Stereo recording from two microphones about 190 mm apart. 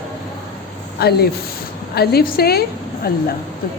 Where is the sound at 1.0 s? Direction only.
55° left (ahead or behind).